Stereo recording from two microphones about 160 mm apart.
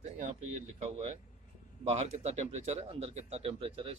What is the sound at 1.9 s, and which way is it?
Speech, 40° right (ahead or behind).